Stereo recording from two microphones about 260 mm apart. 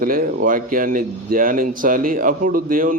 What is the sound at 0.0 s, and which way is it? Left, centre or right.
Speech, right.